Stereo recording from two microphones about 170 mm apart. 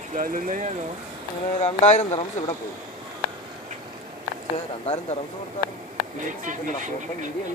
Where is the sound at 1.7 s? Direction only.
40° left (ahead or behind).